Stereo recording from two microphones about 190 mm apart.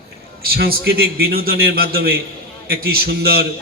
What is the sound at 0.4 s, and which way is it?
A man's voice, 50° right (ahead or behind).